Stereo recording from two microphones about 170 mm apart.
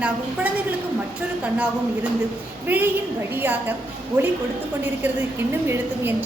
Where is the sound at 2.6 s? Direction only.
10° right (ahead or behind).